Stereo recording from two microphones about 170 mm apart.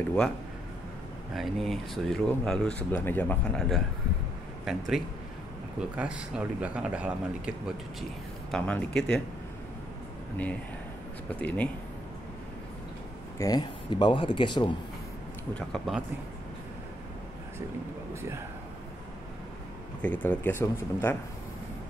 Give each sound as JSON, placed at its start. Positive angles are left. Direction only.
{"t": 1.3, "sound": "speech", "side_deg": 0}
{"t": 8.5, "sound": "speech", "side_deg": 5}
{"t": 10.3, "sound": "speech", "side_deg": 10}
{"t": 13.4, "sound": "a man's voice", "side_deg": 25}
{"t": 15.5, "sound": "speech", "side_deg": 0}
{"t": 20.0, "sound": "speech", "side_deg": 10}